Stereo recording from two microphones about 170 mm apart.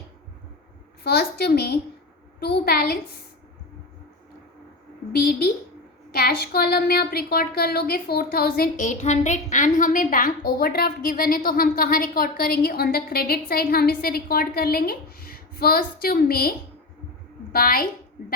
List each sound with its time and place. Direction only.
1.0 s a child's voice: 70° left (ahead or behind)
5.1 s a woman's voice: 65° left (ahead or behind)